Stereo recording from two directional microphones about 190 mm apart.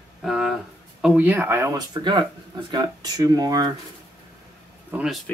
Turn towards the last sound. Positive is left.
turn(degrees=-5)  # may be behind; listen again after turning